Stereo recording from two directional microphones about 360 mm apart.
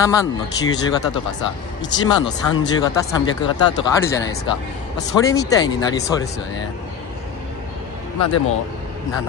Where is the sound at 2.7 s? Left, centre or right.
Centre.